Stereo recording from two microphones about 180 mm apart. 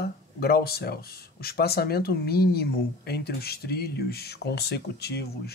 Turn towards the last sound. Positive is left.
turn(degrees=60)  # may be behind; listen again after turning